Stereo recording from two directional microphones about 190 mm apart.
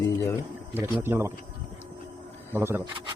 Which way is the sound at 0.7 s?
10° right (ahead or behind).